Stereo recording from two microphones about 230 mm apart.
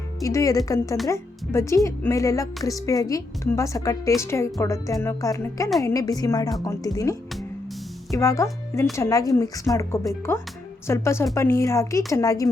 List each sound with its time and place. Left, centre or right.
0.2 s a woman's voice: centre